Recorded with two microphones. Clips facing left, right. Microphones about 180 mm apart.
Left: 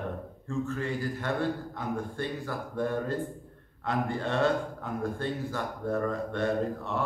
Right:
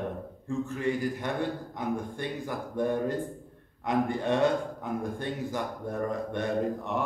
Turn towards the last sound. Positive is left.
turn(degrees=-15)  # may be behind; listen again after turning